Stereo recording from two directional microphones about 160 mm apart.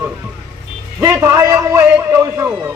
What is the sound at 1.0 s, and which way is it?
A man's voice, 20° right (ahead or behind).